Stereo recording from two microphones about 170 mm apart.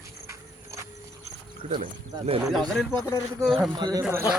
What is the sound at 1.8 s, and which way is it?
Speech, 40° right (ahead or behind).